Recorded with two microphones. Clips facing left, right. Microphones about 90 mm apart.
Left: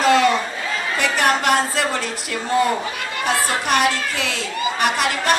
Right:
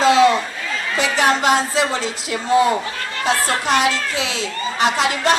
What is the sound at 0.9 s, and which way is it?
Speech, 20° right (ahead or behind).